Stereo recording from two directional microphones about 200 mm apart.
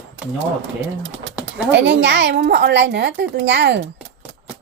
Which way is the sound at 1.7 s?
60° right (ahead or behind).